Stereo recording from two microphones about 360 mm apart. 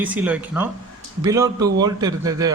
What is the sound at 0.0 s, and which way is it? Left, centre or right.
A man's voice, centre.